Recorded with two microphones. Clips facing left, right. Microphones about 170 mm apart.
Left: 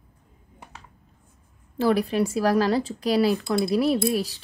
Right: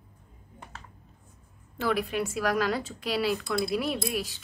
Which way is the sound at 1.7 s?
35° left (ahead or behind).